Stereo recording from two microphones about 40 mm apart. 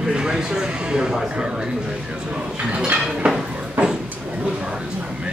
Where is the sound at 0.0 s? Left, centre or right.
Centre.